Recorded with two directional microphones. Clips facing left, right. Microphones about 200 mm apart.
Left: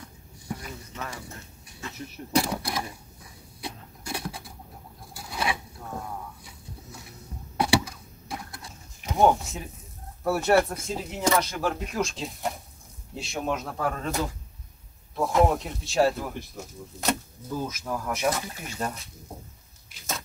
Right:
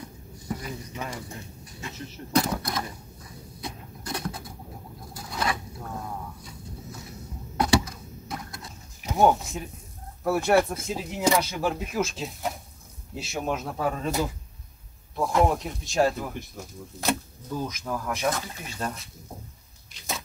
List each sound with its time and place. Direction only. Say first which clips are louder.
0.9 s speech: right 3 dB; 15° right (ahead or behind)
2.0 s speech: right 1 dB; 10° left (ahead or behind)
3.6 s a sound: right 1 dB; 10° left (ahead or behind)
5.1 s patter: even; 5° left (ahead or behind)
7.5 s a sound: right 1 dB; 10° left (ahead or behind)
9.0 s speech: even; centre (ahead or behind)